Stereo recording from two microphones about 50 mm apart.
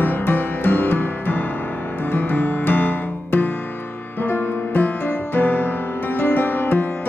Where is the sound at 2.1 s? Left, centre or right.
Left.